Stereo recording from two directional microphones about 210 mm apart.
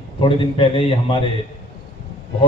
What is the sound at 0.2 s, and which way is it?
A man's voice, 25° left (ahead or behind).